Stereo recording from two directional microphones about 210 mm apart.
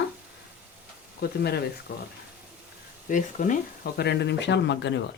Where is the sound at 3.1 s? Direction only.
40° left (ahead or behind); by 4.9 s 55° left (ahead or behind).